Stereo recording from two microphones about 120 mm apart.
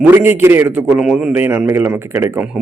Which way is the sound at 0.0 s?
15° right (ahead or behind).